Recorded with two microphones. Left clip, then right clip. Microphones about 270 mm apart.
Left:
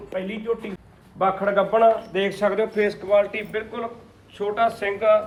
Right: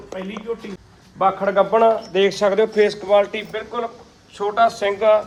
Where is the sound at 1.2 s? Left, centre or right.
Right.